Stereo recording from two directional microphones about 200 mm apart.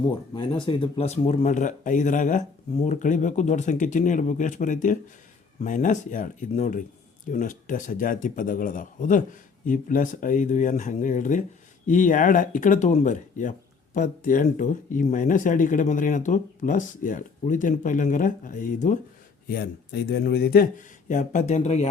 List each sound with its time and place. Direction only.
0.1 s speech: 25° left (ahead or behind)